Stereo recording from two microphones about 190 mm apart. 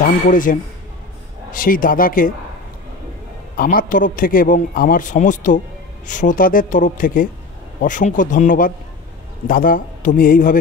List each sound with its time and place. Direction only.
0.3 s a man's voice: 45° left (ahead or behind)
3.5 s a man's voice: 45° left (ahead or behind)